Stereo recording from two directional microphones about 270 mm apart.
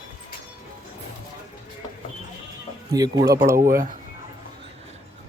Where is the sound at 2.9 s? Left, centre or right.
Centre.